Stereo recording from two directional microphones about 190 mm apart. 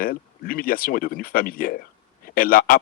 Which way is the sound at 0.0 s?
50° left (ahead or behind).